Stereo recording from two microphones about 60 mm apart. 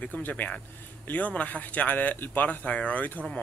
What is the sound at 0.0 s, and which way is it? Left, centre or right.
Speech, left.